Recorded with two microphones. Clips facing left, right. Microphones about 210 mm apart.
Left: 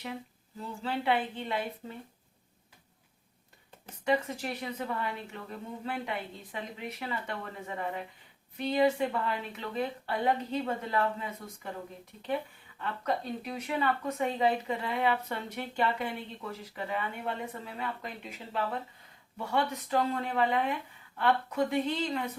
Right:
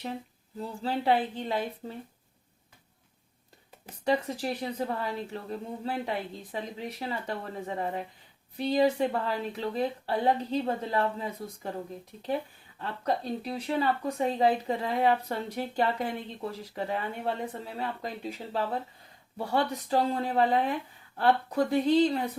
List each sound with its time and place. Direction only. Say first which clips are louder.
0.6 s speech: right 3 dB; 35° right (ahead or behind)
4.0 s speech: right 2 dB; 35° right (ahead or behind)
12.8 s speech: right 2 dB; 35° right (ahead or behind)